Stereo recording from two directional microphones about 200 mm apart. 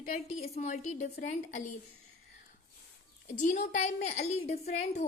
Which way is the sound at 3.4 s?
40° left (ahead or behind).